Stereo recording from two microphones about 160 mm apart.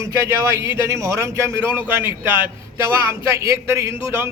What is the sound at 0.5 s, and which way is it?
A man's voice, 15° right (ahead or behind).